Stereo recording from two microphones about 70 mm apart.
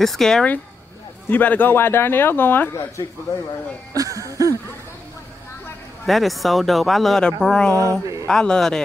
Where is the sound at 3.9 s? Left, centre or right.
Right.